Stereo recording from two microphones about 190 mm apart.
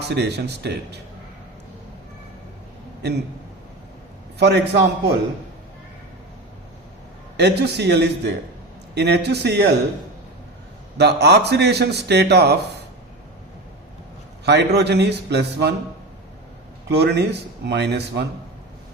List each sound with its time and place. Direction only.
0.1 s a man's voice: 60° right (ahead or behind)
4.4 s a man's voice: 60° right (ahead or behind)
7.3 s a man's voice: 60° right (ahead or behind)
10.9 s a man's voice: 60° right (ahead or behind)
14.4 s a man's voice: 60° right (ahead or behind)
16.9 s a man's voice: 60° right (ahead or behind)